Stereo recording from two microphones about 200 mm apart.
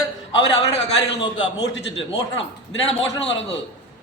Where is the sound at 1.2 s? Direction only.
25° left (ahead or behind).